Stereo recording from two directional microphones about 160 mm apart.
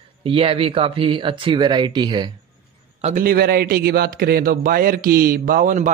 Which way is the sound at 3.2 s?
70° right (ahead or behind).